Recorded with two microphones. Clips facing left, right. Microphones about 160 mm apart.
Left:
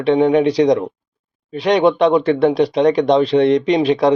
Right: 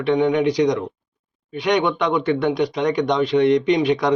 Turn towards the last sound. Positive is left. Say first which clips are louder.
# left 4 dB
turn(degrees=30)  # may be behind; listen again after turning